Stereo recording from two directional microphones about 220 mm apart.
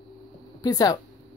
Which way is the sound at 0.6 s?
15° left (ahead or behind).